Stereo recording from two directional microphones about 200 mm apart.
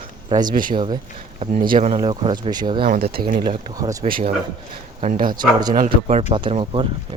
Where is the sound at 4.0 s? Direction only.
40° right (ahead or behind).